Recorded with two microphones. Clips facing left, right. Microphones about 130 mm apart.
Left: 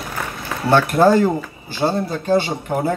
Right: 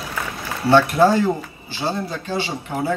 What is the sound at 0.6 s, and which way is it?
A man's voice, 50° left (ahead or behind).